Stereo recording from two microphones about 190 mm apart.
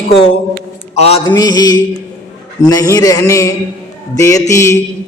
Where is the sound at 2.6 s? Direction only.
20° left (ahead or behind).